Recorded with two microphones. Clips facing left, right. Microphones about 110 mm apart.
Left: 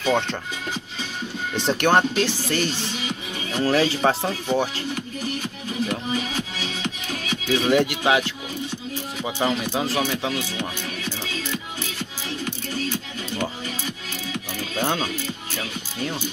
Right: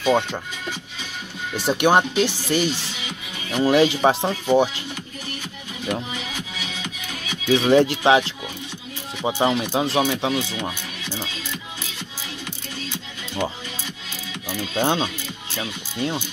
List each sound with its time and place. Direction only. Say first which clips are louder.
0.0 s speech: right 2 dB; 10° right (ahead or behind)
1.5 s speech: right 2 dB; 10° right (ahead or behind)
7.5 s speech: right 4 dB; 25° right (ahead or behind)
14.8 s speech: right 3 dB; 25° right (ahead or behind)